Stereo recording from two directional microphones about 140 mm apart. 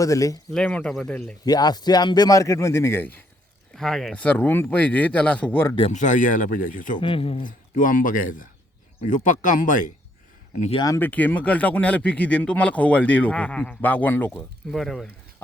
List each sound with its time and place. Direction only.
0.0 s a man's voice: 25° left (ahead or behind)
0.5 s speech: 5° left (ahead or behind)
1.5 s a man's voice: 30° left (ahead or behind)
3.8 s speech: centre (ahead or behind)
5.9 s speech: 60° left (ahead or behind)
7.0 s speech: 40° left (ahead or behind)
7.4 s speech: 75° left (ahead or behind)
10.8 s a man's voice: 25° left (ahead or behind)
11.0 s speech: 10° left (ahead or behind)
14.7 s speech: centre (ahead or behind)